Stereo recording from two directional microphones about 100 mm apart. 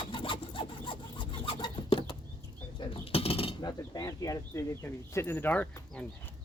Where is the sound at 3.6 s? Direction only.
40° left (ahead or behind).